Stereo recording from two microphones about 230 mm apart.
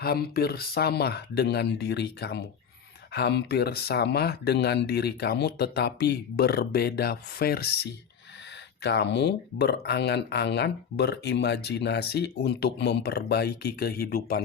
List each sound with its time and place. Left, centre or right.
0.0 s speech: left